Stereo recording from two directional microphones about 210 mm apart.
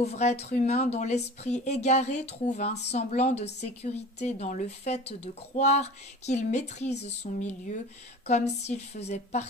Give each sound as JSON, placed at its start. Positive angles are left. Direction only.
{"t": 0.0, "sound": "a woman's voice", "side_deg": 30}